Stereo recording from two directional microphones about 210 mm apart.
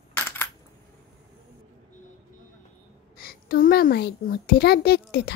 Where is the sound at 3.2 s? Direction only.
45° left (ahead or behind).